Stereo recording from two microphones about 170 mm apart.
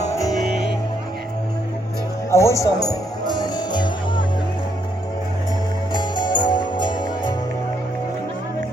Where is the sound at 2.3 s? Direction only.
15° left (ahead or behind).